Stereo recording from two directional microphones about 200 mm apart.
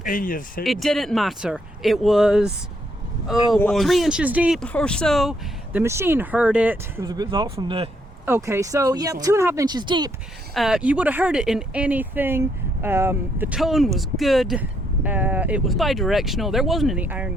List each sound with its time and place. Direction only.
0.0 s speech: 45° left (ahead or behind)
0.6 s speech: centre (ahead or behind)
3.5 s speech: centre (ahead or behind)
5.7 s speech: 15° right (ahead or behind)
8.2 s speech: 15° right (ahead or behind)
10.5 s speech: centre (ahead or behind)